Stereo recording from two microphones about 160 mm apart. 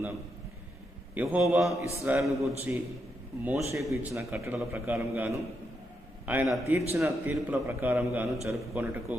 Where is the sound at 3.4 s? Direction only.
15° right (ahead or behind).